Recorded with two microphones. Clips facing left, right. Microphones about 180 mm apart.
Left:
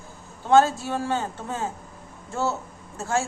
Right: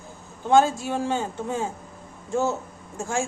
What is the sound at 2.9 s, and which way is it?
Speech, 15° right (ahead or behind).